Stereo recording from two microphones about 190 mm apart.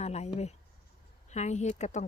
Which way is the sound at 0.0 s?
35° left (ahead or behind).